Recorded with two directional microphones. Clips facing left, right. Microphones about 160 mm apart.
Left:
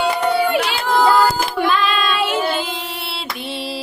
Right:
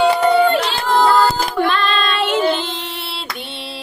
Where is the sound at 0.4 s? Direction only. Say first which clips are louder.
Right 2 dB; 10° left (ahead or behind).